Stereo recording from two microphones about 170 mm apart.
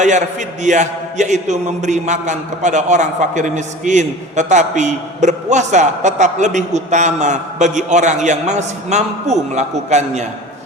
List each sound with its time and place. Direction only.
0.0 s a man's voice: 45° right (ahead or behind)